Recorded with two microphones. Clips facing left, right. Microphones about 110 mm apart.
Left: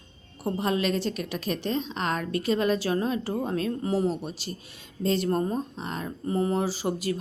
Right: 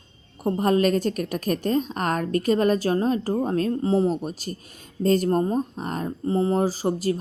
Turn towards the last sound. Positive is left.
turn(degrees=-40)  # may be behind; listen again after turning